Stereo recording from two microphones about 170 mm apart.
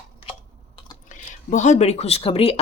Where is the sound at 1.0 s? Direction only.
50° left (ahead or behind).